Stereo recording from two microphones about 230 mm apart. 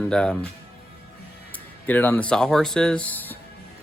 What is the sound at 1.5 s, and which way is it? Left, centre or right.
Speech, centre.